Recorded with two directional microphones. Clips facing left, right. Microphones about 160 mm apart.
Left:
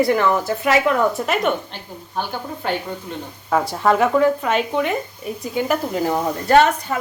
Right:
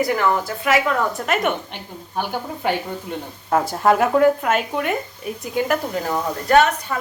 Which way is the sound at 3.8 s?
5° right (ahead or behind).